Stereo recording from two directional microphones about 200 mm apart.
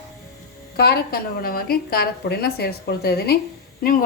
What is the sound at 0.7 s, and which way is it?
A woman's voice, 50° left (ahead or behind).